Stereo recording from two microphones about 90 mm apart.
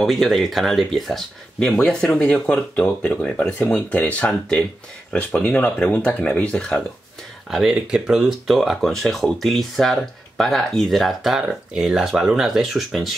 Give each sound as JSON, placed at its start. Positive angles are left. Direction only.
{"t": 0.0, "sound": "speech", "side_deg": 0}
{"t": 7.7, "sound": "speech", "side_deg": -10}